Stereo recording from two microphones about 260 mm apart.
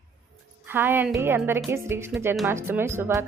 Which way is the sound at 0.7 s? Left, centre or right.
Centre.